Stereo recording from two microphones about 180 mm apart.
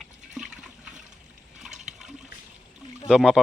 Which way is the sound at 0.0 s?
5° right (ahead or behind).